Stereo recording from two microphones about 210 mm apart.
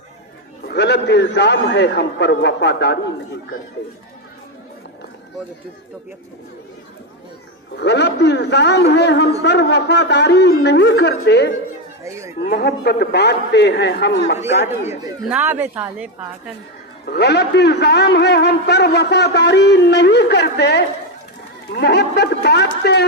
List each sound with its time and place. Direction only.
0.6 s a man's voice: 50° left (ahead or behind)
7.8 s a man's voice: 55° left (ahead or behind)
12.0 s a woman's voice: 15° right (ahead or behind)
12.4 s a man's voice: 50° left (ahead or behind)
14.7 s a woman's voice: 10° right (ahead or behind)
17.1 s a man's voice: 50° left (ahead or behind)